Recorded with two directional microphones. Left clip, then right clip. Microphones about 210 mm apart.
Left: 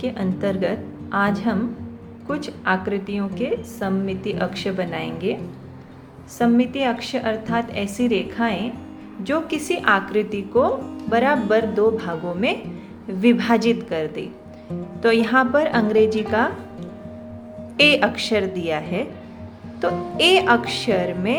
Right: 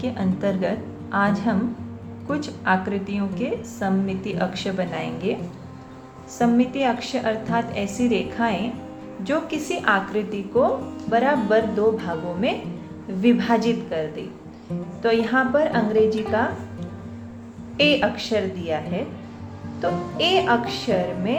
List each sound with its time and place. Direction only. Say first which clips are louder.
0.0 s a woman's voice: left 1 dB; 20° left (ahead or behind)
6.4 s a woman's voice: left 1 dB; 20° left (ahead or behind)
17.7 s a woman's voice: left 3 dB; 30° left (ahead or behind)